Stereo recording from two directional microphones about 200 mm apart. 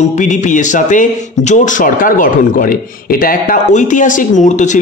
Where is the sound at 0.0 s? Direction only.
35° left (ahead or behind).